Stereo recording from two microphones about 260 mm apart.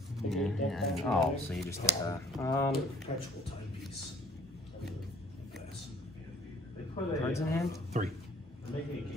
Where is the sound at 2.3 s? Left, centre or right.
Centre.